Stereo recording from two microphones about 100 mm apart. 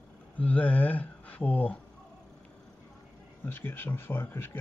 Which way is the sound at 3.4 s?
20° left (ahead or behind).